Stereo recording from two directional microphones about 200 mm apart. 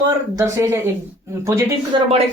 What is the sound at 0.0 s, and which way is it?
Speech, 15° right (ahead or behind).